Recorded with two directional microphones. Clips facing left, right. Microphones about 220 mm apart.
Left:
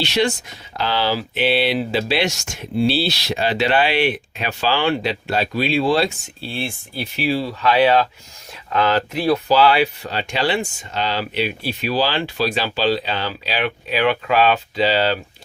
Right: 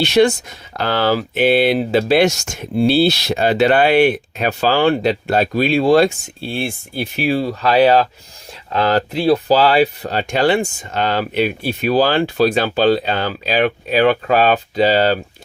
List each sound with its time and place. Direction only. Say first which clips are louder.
0.0 s speech: right 7 dB; 50° right (ahead or behind)